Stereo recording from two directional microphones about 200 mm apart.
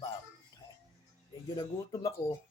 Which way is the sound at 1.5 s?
15° left (ahead or behind).